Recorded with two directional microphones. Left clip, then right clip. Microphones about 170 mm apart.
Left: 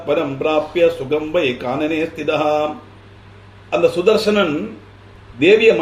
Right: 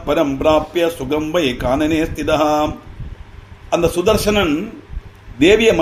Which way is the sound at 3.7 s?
70° right (ahead or behind).